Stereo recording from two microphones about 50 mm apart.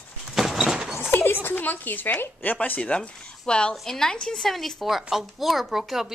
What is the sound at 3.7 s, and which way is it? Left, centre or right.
A woman's voice, centre.